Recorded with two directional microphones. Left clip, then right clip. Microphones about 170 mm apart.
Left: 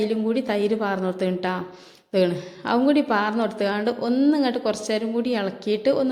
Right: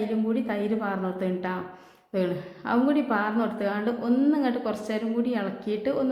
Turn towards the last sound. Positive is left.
turn(degrees=25)  # may be behind; listen again after turning